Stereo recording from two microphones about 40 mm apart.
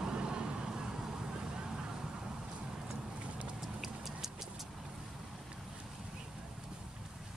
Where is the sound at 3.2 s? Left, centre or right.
Right.